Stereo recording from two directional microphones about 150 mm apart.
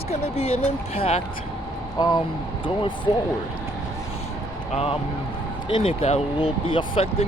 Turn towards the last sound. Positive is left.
turn(degrees=40)  # may be behind; listen again after turning